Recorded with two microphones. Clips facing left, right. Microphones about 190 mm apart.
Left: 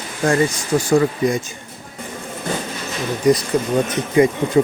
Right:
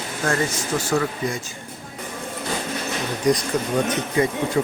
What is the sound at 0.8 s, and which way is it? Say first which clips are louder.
Speech: left 8 dB; 15° left (ahead or behind).